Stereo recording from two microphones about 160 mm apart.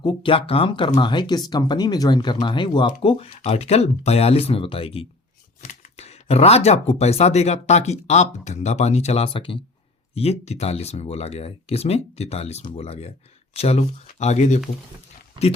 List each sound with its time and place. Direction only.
0.0 s speech: 30° left (ahead or behind); by 14.6 s 45° left (ahead or behind)